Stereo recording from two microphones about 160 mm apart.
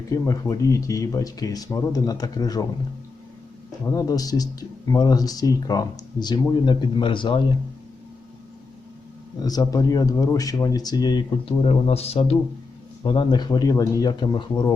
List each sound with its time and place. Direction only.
0.1 s speech: 20° left (ahead or behind)
3.9 s speech: 20° left (ahead or behind)
9.4 s speech: 25° left (ahead or behind)